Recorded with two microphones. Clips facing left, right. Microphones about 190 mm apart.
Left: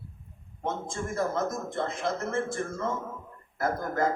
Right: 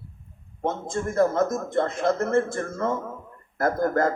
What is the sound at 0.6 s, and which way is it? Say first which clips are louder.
A man's voice: right 6 dB; 55° right (ahead or behind).